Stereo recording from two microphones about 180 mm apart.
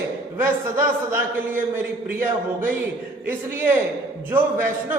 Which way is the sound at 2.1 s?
50° right (ahead or behind).